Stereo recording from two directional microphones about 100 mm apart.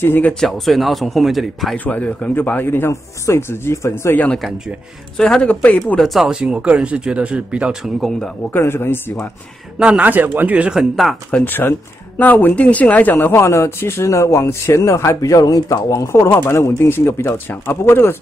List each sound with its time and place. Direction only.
0.0 s speech: 20° left (ahead or behind)
0.3 s speech: 5° left (ahead or behind)
1.9 s speech: 10° left (ahead or behind)
5.1 s speech: 10° left (ahead or behind)
5.9 s speech: centre (ahead or behind)
8.5 s speech: 25° left (ahead or behind)
9.8 s speech: 15° right (ahead or behind)
11.2 s speech: 15° left (ahead or behind)